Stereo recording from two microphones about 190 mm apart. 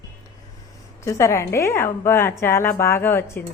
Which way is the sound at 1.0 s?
15° left (ahead or behind).